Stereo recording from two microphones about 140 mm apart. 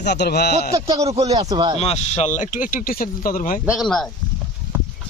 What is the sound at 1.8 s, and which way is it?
Speech, 50° left (ahead or behind).